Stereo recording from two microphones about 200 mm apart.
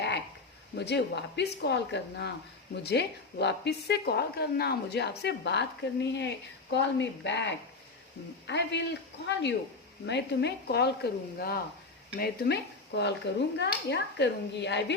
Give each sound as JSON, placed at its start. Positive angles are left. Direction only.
{"t": 0.8, "sound": "a woman's voice", "side_deg": 60}